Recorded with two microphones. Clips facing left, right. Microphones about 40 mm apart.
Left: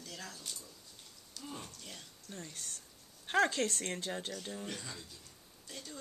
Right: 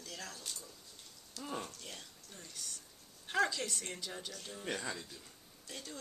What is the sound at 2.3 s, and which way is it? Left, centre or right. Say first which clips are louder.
Speech: left 4 dB; left.